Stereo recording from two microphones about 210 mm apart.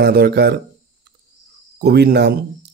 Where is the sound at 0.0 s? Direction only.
50° right (ahead or behind).